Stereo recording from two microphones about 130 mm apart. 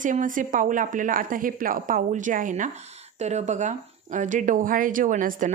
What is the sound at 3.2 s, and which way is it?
A woman's voice, 60° right (ahead or behind).